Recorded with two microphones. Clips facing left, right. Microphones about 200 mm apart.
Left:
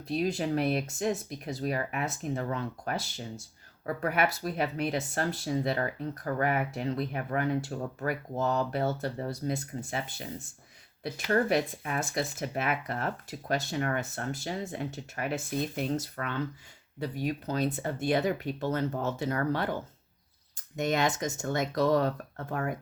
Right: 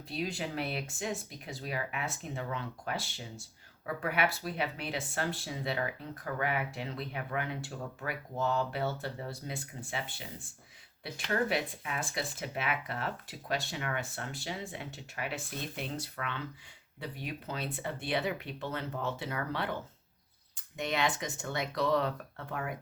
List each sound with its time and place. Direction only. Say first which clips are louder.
0.1 s speech: left 8 dB; 40° left (ahead or behind)